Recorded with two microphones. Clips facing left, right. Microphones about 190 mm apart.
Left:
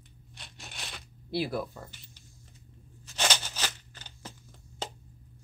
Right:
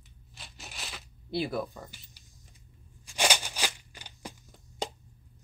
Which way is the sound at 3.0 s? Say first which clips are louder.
Right 2 dB; 10° right (ahead or behind).